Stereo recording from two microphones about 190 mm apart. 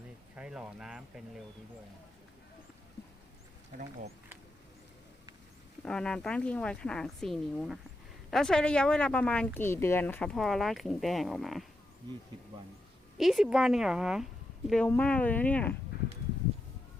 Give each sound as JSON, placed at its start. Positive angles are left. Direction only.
{"t": 0.3, "sound": "speech", "side_deg": -5}
{"t": 5.8, "sound": "speech", "side_deg": 5}
{"t": 13.1, "sound": "speech", "side_deg": 0}